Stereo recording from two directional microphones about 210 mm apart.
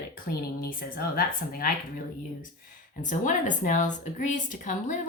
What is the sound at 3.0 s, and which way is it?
Speech, 35° left (ahead or behind).